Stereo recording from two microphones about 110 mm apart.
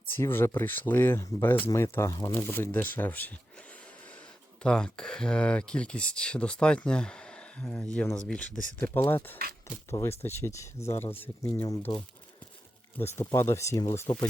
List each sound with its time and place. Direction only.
0.2 s speech: 20° left (ahead or behind)
4.6 s speech: 5° left (ahead or behind)
8.9 s speech: 25° left (ahead or behind)
13.0 s speech: 25° left (ahead or behind)